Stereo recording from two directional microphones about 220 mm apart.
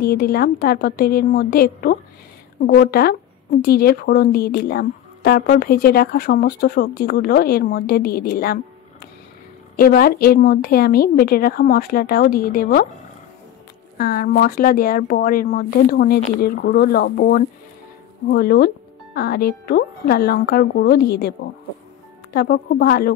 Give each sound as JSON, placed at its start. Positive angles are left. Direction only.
{"t": 0.0, "sound": "a woman's voice", "side_deg": 45}
{"t": 9.8, "sound": "a woman's voice", "side_deg": 45}
{"t": 13.9, "sound": "a woman's voice", "side_deg": 40}
{"t": 22.3, "sound": "a woman's voice", "side_deg": 45}